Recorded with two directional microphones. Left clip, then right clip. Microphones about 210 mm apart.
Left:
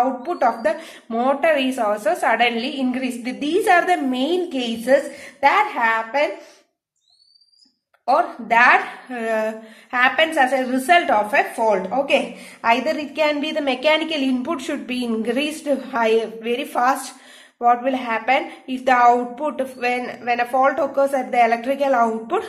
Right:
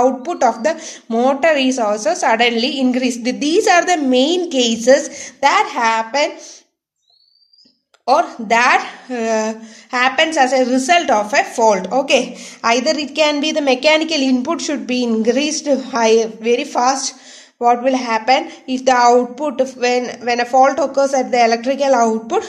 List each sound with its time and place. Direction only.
0.2 s a woman's voice: 40° right (ahead or behind)
8.0 s a woman's voice: 40° right (ahead or behind)